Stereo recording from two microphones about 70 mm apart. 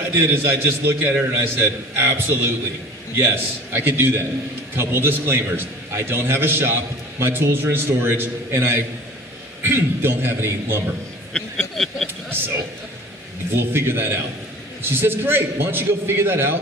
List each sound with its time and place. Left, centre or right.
0.1 s a man's voice: right
11.3 s a sound: centre
13.6 s a man's voice: right